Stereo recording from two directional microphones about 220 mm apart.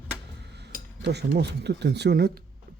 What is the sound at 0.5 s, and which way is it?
Speech, 50° right (ahead or behind).